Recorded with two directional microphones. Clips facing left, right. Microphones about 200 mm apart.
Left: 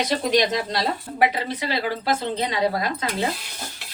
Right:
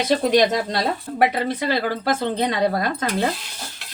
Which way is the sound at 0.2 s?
50° right (ahead or behind).